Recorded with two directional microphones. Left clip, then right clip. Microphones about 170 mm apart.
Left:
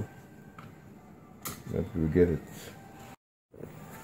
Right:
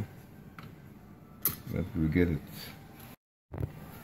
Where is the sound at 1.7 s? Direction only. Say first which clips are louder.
Left 5 dB; 45° left (ahead or behind).